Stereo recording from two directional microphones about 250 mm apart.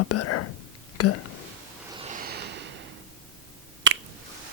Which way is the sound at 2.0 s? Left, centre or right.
Right.